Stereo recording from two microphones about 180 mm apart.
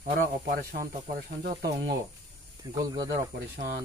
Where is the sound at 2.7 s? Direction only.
20° right (ahead or behind).